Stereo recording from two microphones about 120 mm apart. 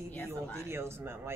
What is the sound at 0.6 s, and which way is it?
Speech, 20° right (ahead or behind).